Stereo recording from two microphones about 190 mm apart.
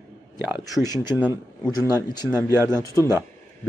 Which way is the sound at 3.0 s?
15° right (ahead or behind).